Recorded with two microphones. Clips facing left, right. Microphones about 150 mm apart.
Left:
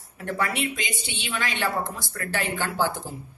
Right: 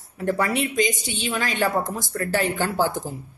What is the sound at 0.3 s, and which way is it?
A woman's voice, 40° right (ahead or behind).